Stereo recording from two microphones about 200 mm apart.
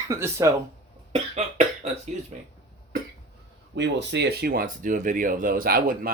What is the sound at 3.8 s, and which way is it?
Speech, 60° right (ahead or behind).